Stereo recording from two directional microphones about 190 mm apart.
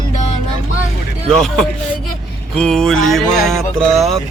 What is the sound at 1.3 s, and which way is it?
Speech, centre (ahead or behind).